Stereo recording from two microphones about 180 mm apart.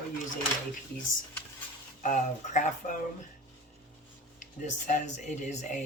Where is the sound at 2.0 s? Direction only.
45° left (ahead or behind).